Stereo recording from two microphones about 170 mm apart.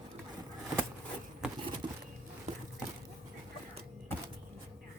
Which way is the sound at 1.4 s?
5° right (ahead or behind).